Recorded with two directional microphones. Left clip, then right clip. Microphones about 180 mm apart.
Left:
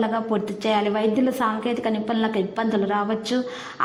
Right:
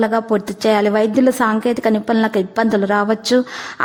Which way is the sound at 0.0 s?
40° right (ahead or behind).